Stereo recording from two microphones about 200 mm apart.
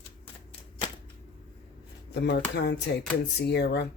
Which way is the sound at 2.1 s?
55° left (ahead or behind).